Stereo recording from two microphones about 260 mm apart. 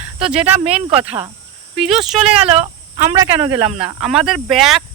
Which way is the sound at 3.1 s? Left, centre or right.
Centre.